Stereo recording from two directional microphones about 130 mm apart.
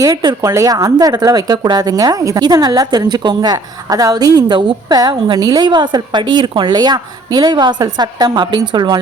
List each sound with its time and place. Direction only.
0.0 s speech: 30° right (ahead or behind)